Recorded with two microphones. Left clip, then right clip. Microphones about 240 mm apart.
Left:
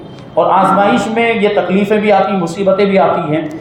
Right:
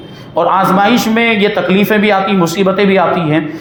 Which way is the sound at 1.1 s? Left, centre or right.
Right.